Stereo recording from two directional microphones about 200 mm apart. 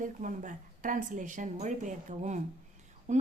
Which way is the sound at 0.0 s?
40° right (ahead or behind).